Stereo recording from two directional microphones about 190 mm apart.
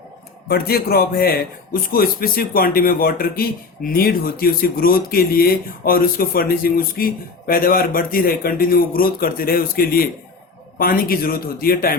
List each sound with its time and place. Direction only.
0.4 s speech: 55° left (ahead or behind)